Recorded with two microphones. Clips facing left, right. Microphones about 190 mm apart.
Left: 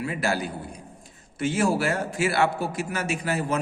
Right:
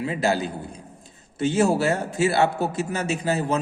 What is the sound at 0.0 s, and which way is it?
A man's voice, 20° right (ahead or behind).